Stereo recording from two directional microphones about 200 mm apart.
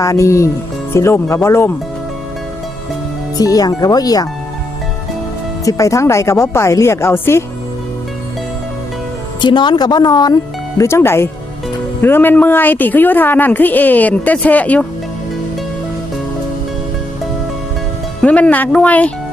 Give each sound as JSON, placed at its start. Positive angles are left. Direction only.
{"t": 0.0, "sound": "a woman's voice", "side_deg": 15}
{"t": 3.3, "sound": "a woman's voice", "side_deg": 20}
{"t": 5.6, "sound": "a woman's voice", "side_deg": 15}
{"t": 9.4, "sound": "a woman's voice", "side_deg": 25}
{"t": 18.2, "sound": "a woman's voice", "side_deg": 5}